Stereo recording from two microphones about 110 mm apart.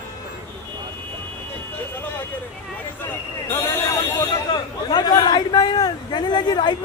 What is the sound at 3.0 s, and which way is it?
Speech, 20° left (ahead or behind).